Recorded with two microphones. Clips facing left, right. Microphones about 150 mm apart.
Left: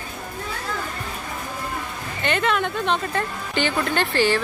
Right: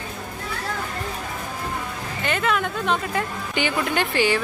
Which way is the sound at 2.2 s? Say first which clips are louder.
Left 1 dB; 5° right (ahead or behind).